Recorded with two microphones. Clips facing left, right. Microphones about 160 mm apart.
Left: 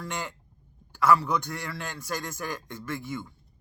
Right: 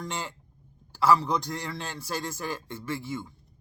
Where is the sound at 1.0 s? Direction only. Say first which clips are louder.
Even; 30° right (ahead or behind).